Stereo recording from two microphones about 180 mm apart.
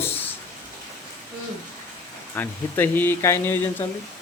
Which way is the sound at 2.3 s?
10° left (ahead or behind).